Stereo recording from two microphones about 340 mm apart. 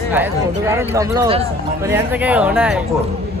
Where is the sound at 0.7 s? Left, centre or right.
Centre.